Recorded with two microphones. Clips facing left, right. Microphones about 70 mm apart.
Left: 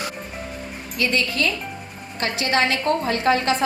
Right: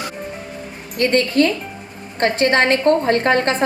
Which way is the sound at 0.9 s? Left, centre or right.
Right.